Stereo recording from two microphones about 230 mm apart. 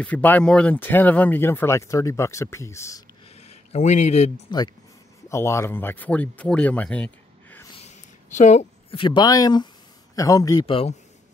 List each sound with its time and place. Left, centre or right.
0.0 s speech: centre
3.3 s speech: left
5.3 s speech: centre
7.7 s a sound: left
10.1 s speech: centre